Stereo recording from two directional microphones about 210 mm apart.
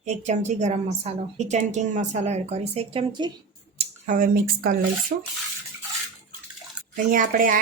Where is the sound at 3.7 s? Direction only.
40° right (ahead or behind).